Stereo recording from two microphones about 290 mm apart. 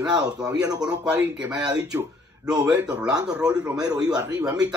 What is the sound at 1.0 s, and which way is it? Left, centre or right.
Speech, centre.